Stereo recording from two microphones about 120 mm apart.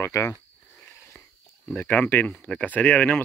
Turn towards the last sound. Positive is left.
turn(degrees=15)  # may be behind; listen again after turning